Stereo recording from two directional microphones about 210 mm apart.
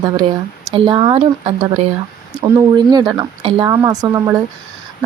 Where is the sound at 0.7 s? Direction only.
25° right (ahead or behind).